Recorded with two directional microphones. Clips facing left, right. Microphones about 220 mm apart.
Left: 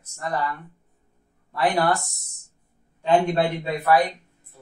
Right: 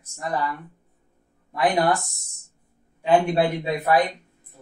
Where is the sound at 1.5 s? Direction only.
15° right (ahead or behind).